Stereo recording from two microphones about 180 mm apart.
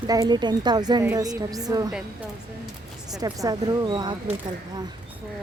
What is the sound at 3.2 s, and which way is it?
Speech, 20° right (ahead or behind).